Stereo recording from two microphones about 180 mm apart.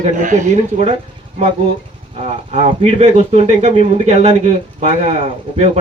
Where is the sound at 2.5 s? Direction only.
30° right (ahead or behind).